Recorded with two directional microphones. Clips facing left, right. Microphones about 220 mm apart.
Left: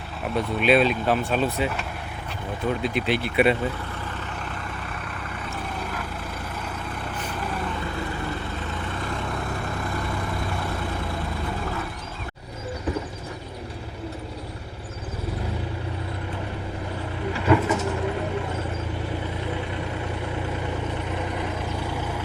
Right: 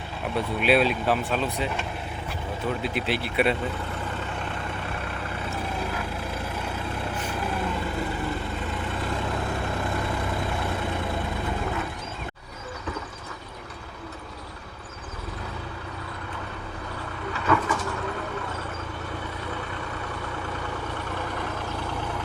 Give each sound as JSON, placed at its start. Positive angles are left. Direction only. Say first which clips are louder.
{"t": 0.3, "sound": "speech", "louder": "left 2 dB", "side_deg": -5}
{"t": 2.8, "sound": "speech", "louder": "left 3 dB", "side_deg": -5}
{"t": 17.3, "sound": "vehicle", "louder": "left 4 dB", "side_deg": 25}
{"t": 21.2, "sound": "vehicle", "louder": "left 3 dB", "side_deg": 15}